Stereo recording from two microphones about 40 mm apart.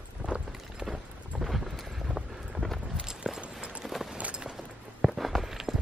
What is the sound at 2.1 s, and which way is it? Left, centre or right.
Vehicle, centre.